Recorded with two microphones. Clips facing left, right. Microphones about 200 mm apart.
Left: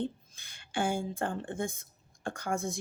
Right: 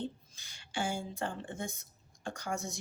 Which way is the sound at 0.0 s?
55° left (ahead or behind).